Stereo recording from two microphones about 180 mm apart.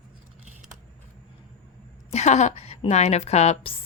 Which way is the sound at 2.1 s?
40° left (ahead or behind).